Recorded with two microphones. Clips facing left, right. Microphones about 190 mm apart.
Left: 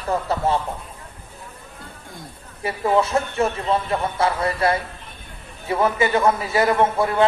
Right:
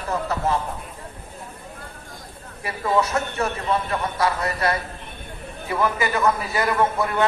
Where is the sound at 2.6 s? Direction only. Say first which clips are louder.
Left 3 dB; 25° left (ahead or behind).